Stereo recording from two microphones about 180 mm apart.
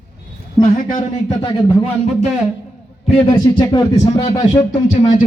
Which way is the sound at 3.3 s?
20° left (ahead or behind).